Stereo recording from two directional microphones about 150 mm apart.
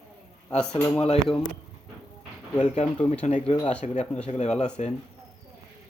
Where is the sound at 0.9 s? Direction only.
45° left (ahead or behind).